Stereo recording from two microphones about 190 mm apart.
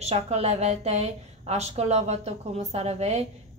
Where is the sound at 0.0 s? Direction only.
35° right (ahead or behind).